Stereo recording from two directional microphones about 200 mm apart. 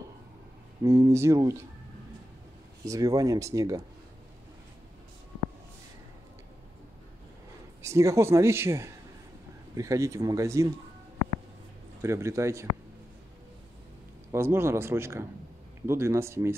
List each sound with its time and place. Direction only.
0.8 s speech: 15° right (ahead or behind)
2.8 s speech: 15° right (ahead or behind)
7.8 s speech: 15° right (ahead or behind)
12.0 s speech: 15° right (ahead or behind)
14.3 s speech: 10° right (ahead or behind)